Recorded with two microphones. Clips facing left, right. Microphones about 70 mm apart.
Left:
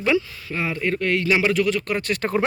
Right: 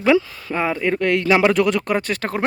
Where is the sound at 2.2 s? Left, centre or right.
Right.